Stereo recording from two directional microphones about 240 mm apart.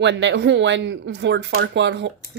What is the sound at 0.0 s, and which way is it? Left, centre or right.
Speech, right.